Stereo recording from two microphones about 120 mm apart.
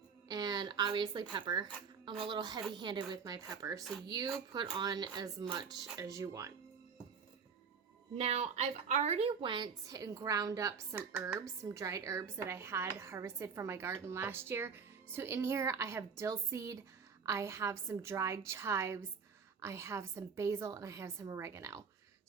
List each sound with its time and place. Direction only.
0.3 s a sound: 35° right (ahead or behind)
2.0 s a woman's voice: 45° right (ahead or behind); by 6.5 s 25° right (ahead or behind)
8.1 s a woman's voice: 60° right (ahead or behind)
9.4 s a woman's voice: 40° right (ahead or behind)